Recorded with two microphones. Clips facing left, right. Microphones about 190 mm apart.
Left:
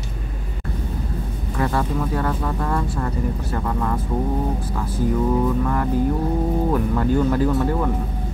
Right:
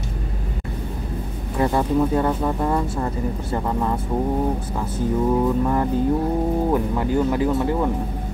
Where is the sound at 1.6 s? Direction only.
20° right (ahead or behind).